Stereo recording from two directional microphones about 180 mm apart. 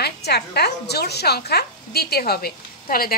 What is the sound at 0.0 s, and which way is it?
Speech, 65° left (ahead or behind).